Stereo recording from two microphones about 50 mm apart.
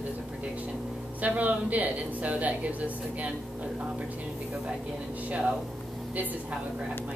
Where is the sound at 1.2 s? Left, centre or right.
Right.